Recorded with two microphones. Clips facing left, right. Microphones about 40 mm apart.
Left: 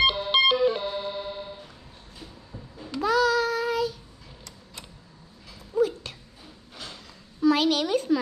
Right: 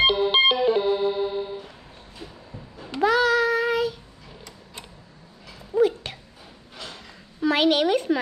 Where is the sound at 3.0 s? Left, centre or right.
Right.